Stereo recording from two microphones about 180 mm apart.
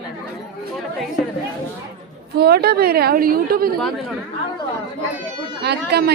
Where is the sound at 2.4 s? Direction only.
60° right (ahead or behind).